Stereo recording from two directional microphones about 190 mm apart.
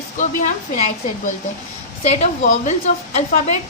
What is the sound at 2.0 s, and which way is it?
A woman's voice, 35° left (ahead or behind).